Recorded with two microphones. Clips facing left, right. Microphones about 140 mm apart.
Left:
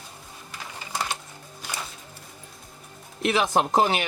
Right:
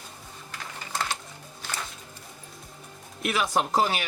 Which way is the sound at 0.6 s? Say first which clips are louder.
Left 1 dB; 10° left (ahead or behind).